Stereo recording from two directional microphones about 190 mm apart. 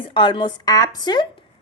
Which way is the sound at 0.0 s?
25° left (ahead or behind).